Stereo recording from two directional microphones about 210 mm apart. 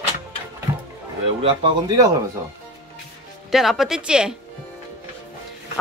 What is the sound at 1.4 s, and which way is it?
Speech, 25° right (ahead or behind).